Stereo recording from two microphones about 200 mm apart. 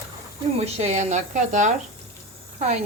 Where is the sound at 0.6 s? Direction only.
30° right (ahead or behind).